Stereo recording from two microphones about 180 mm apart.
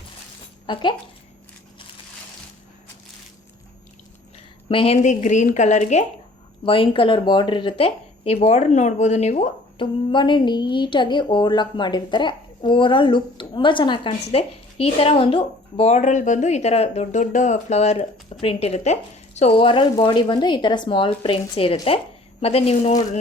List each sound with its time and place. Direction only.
0.7 s speech: 25° left (ahead or behind)
4.7 s speech: 30° left (ahead or behind)
6.7 s speech: 30° left (ahead or behind)